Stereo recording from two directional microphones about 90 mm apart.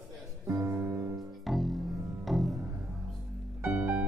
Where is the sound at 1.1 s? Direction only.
Centre (ahead or behind).